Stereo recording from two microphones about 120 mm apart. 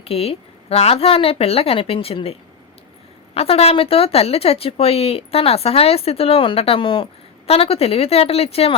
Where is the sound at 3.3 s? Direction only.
55° left (ahead or behind).